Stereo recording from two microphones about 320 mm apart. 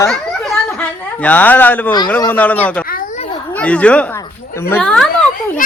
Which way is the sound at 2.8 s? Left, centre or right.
Left.